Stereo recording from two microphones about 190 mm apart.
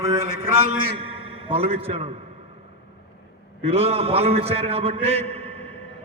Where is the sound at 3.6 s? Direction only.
30° right (ahead or behind).